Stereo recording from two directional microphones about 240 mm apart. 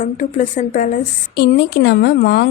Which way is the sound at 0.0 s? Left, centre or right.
Left.